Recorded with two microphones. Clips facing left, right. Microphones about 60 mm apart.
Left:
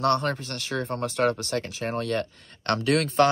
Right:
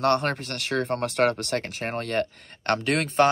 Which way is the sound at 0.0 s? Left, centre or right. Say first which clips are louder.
Right 1 dB; right.